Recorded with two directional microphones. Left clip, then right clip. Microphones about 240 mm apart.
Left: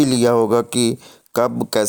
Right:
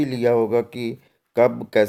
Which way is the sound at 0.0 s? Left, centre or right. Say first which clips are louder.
Left 4 dB; left.